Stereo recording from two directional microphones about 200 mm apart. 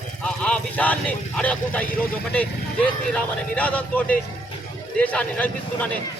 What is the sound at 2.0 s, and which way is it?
A man's voice, 5° left (ahead or behind).